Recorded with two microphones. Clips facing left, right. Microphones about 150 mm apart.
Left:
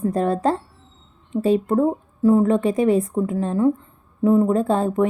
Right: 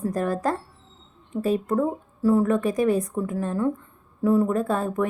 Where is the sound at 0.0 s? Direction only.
25° left (ahead or behind).